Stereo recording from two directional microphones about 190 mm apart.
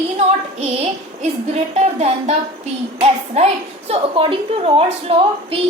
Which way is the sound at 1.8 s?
35° right (ahead or behind).